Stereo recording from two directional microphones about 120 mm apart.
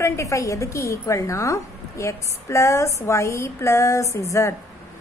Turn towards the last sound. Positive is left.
turn(degrees=25)  # may be behind; listen again after turning